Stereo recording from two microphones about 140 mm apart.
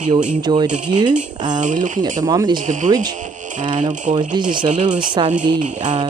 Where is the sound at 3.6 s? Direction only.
35° right (ahead or behind).